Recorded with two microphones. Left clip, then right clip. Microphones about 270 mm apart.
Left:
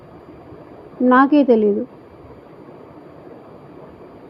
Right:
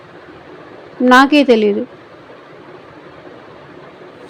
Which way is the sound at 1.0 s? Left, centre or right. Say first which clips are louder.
Right 4 dB; centre.